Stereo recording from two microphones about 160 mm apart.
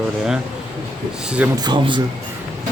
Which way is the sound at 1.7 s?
30° right (ahead or behind).